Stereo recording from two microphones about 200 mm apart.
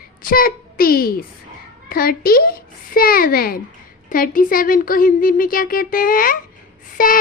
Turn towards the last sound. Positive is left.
turn(degrees=45)  # may be behind; listen again after turning